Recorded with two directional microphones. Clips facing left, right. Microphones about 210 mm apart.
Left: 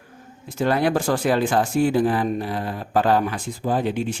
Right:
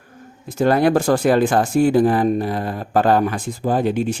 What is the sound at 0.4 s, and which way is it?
Speech, 45° right (ahead or behind).